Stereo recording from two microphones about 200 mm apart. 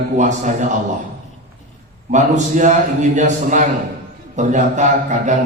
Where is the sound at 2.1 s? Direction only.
35° right (ahead or behind).